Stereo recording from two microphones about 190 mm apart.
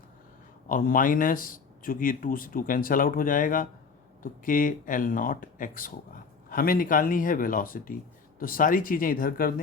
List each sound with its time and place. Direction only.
0.7 s a man's voice: 45° left (ahead or behind)